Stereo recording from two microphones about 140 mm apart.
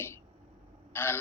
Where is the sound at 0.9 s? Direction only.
15° left (ahead or behind).